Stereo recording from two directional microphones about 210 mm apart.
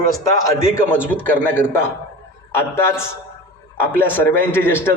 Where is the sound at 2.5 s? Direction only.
10° left (ahead or behind).